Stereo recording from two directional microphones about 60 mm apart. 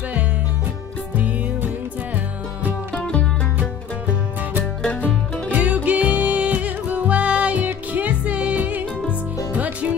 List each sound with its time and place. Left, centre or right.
2.9 s music: centre
5.5 s music: right